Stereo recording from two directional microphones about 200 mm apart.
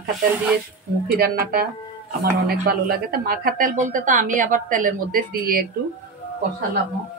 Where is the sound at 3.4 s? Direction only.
45° right (ahead or behind).